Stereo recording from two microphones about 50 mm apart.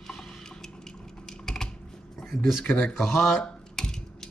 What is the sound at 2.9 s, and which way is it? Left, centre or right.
Speech, centre.